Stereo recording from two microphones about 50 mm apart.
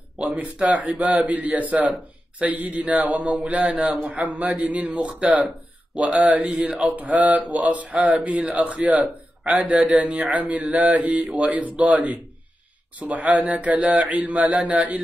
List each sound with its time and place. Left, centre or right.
0.2 s a man's voice: right
6.2 s speech: right
9.4 s a man's voice: centre
9.7 s a man's voice: right